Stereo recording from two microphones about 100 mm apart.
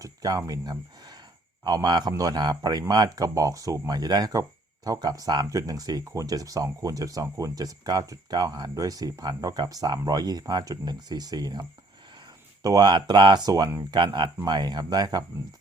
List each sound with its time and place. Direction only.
0.0 s speech: 40° right (ahead or behind)
12.6 s speech: 40° right (ahead or behind)
13.9 s speech: 50° right (ahead or behind)